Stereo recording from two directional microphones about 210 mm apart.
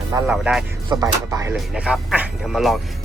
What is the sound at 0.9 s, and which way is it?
Speech, 15° right (ahead or behind).